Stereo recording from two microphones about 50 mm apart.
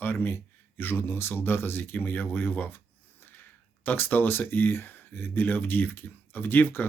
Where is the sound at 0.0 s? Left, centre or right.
Left.